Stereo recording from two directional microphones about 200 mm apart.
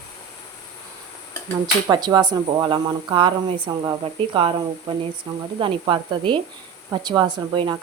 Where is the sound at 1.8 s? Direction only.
20° right (ahead or behind).